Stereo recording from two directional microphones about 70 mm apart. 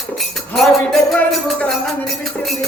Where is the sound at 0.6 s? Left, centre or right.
Centre.